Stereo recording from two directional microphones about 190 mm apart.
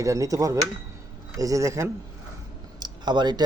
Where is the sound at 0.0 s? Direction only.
15° right (ahead or behind).